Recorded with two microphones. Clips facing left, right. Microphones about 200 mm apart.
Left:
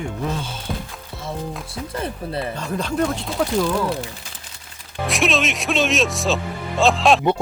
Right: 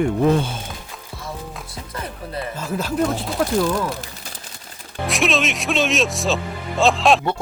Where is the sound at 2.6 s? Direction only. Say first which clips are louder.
Right 2 dB; 5° right (ahead or behind).